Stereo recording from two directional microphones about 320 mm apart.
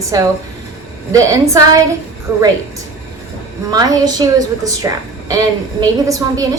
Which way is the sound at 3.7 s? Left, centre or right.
Centre.